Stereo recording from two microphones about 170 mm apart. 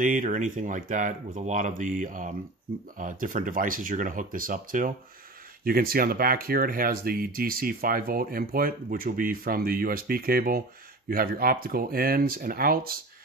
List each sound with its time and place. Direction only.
0.0 s speech: 50° right (ahead or behind)